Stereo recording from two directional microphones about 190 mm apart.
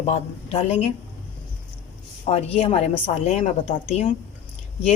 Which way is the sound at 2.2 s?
30° left (ahead or behind).